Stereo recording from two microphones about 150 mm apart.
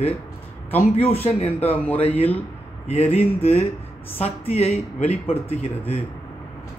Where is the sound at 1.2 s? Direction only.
40° left (ahead or behind).